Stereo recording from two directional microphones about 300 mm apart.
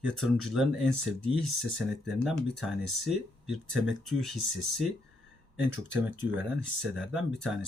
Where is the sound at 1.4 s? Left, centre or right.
Centre.